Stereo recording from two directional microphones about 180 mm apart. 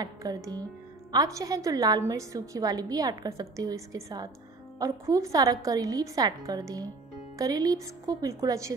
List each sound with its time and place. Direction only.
0.0 s a woman's voice: 20° right (ahead or behind)